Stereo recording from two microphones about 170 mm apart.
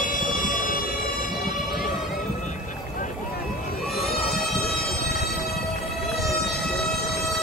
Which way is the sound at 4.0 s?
65° left (ahead or behind).